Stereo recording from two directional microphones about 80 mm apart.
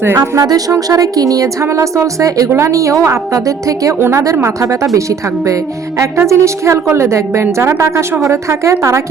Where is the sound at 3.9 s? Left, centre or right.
Right.